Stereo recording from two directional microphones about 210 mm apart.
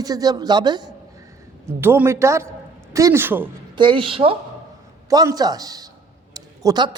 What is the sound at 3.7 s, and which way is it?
A man's voice, 25° right (ahead or behind).